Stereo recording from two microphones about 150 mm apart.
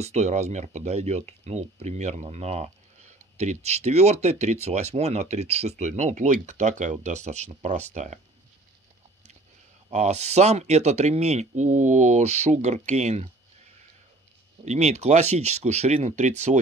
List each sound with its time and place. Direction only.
0.0 s speech: 50° right (ahead or behind)
9.8 s speech: 45° right (ahead or behind)
14.6 s speech: 50° right (ahead or behind)